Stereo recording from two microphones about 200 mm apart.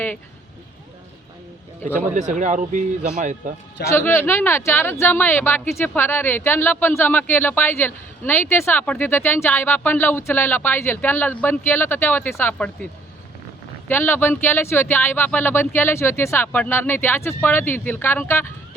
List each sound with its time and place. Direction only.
2.1 s speech: 40° right (ahead or behind)
3.8 s speech: 10° left (ahead or behind)